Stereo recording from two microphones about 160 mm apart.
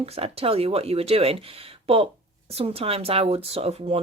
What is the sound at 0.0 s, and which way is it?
Speech, 35° right (ahead or behind).